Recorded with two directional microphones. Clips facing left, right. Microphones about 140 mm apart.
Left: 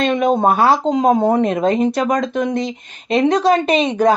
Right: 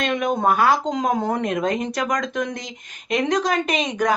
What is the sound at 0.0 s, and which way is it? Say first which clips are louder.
A woman's voice: left 6 dB; 25° left (ahead or behind).